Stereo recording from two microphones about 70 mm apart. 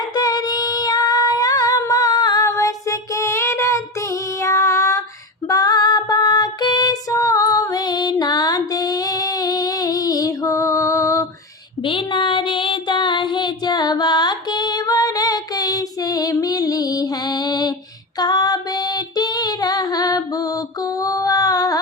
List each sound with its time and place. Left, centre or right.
0.2 s female singing: left
2.4 s child singing: left
4.4 s female singing: left
5.5 s female singing: left
7.1 s female singing: left
13.1 s music: left
21.0 s a sound: left